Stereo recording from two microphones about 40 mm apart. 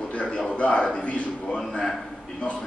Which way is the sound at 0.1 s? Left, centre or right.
Left.